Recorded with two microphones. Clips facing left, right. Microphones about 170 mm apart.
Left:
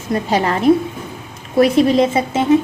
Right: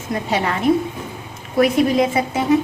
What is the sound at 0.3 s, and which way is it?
Speech, 35° left (ahead or behind).